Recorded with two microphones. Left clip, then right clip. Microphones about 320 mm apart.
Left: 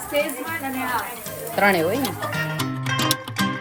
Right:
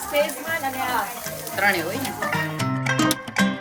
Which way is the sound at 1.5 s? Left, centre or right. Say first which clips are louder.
Left 2 dB; centre.